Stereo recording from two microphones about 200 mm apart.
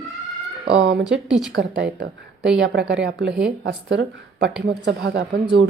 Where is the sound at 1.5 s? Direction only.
55° right (ahead or behind).